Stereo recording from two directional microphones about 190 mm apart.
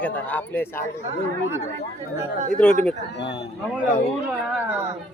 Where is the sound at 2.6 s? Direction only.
5° left (ahead or behind).